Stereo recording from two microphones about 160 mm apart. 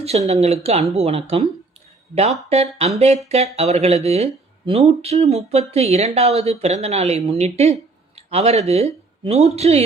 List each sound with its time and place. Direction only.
0.0 s speech: 40° right (ahead or behind)
2.5 s speech: 40° right (ahead or behind)